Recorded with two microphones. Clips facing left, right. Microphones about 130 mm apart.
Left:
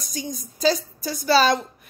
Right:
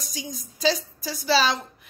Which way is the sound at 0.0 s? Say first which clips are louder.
Left 4 dB; 45° left (ahead or behind).